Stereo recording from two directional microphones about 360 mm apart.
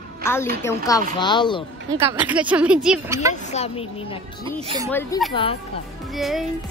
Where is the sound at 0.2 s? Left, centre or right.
Centre.